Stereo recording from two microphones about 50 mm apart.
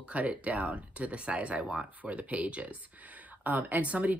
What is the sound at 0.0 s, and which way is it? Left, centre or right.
Speech, right.